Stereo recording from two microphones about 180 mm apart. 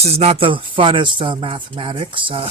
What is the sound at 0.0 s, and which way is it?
Speech, 35° right (ahead or behind).